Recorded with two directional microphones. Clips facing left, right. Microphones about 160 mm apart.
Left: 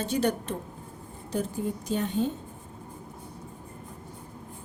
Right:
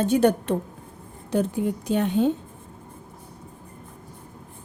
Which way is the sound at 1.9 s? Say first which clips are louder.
Right 7 dB; 70° right (ahead or behind).